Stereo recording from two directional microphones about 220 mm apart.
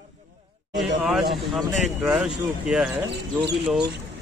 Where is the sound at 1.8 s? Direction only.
5° right (ahead or behind).